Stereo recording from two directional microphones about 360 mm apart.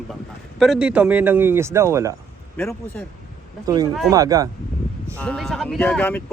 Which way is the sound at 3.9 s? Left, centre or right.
Centre.